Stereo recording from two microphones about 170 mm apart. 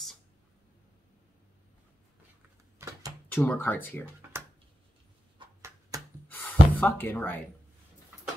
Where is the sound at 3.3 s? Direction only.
10° left (ahead or behind).